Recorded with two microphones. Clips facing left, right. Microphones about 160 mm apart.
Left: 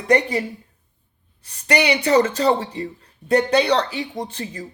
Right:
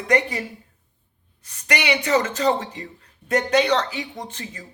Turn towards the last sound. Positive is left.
turn(degrees=35)  # may be behind; listen again after turning